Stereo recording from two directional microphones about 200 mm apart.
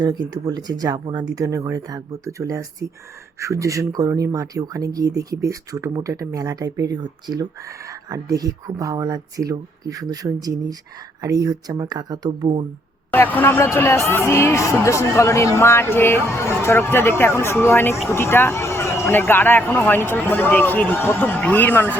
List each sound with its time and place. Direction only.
0.0 s speech: 20° right (ahead or behind)
13.1 s speech: 10° left (ahead or behind)